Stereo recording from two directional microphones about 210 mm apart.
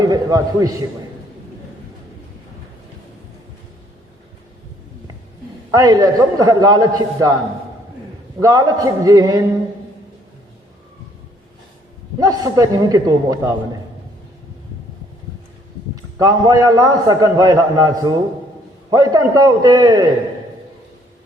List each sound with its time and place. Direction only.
0.0 s a man's voice: 15° right (ahead or behind)
5.7 s a man's voice: 20° right (ahead or behind)
8.4 s a man's voice: 15° right (ahead or behind)
12.2 s a man's voice: 15° right (ahead or behind)
16.0 s a man's voice: 15° right (ahead or behind)